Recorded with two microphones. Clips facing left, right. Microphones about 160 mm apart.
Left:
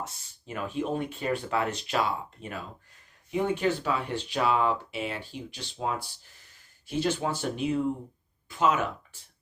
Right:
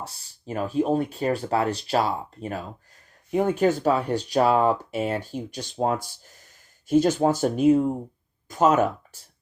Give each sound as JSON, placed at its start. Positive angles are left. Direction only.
{"t": 0.0, "sound": "speech", "side_deg": -35}